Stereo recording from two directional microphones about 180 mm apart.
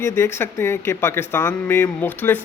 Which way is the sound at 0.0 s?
15° left (ahead or behind).